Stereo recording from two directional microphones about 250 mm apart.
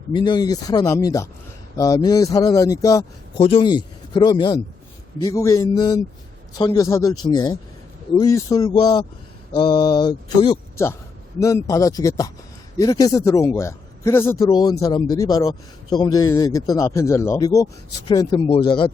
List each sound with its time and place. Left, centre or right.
0.1 s a man's voice: centre